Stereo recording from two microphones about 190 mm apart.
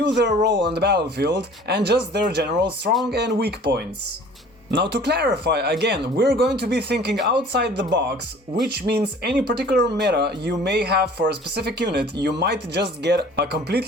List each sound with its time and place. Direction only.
0.4 s speech: 60° right (ahead or behind)